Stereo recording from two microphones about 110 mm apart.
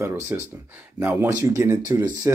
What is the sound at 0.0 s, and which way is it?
Speech, 25° right (ahead or behind).